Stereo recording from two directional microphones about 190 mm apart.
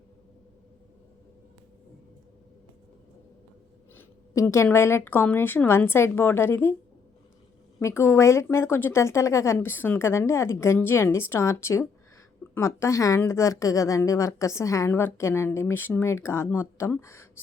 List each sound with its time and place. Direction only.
3.9 s a woman's voice: 15° left (ahead or behind)
7.8 s a woman's voice: 15° left (ahead or behind)